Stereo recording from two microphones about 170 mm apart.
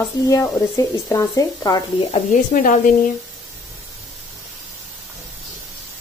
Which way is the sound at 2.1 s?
50° left (ahead or behind).